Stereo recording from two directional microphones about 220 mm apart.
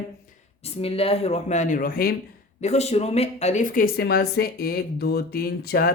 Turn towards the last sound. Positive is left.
turn(degrees=45)  # may be behind; listen again after turning